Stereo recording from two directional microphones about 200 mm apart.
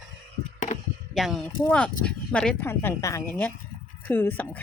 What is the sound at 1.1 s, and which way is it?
Speech, centre (ahead or behind).